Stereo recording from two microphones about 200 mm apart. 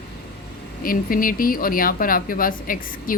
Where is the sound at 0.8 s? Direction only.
45° left (ahead or behind).